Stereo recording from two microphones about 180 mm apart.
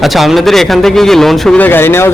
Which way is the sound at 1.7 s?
10° left (ahead or behind).